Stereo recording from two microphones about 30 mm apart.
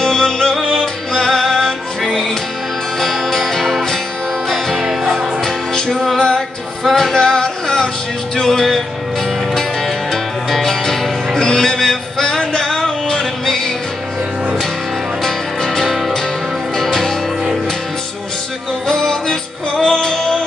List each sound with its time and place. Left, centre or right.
0.0 s music: left
3.0 s music: centre
5.4 s music: centre
9.8 s music: centre
15.2 s music: centre
18.9 s music: left